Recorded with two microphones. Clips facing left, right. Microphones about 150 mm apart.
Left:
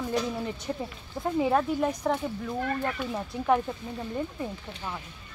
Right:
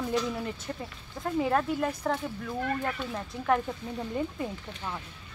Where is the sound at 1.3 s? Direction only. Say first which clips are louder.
Left 2 dB; 5° left (ahead or behind).